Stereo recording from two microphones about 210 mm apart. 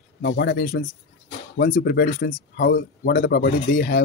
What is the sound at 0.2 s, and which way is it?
Speech, 55° left (ahead or behind).